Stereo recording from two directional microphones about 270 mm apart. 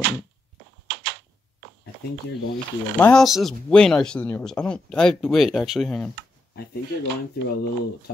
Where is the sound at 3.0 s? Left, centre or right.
Centre.